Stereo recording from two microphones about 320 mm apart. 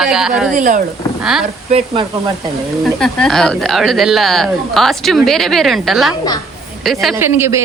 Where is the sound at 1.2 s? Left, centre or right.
Centre.